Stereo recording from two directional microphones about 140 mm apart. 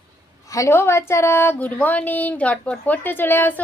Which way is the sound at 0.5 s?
20° left (ahead or behind).